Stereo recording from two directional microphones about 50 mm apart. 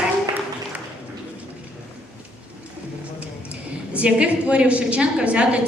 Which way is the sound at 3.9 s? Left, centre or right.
Right.